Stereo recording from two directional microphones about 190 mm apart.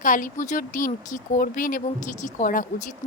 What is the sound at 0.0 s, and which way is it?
A woman's voice, 45° left (ahead or behind).